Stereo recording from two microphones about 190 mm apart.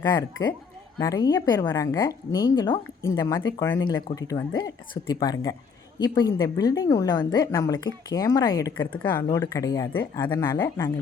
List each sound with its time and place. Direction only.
0.1 s a woman's voice: 20° left (ahead or behind)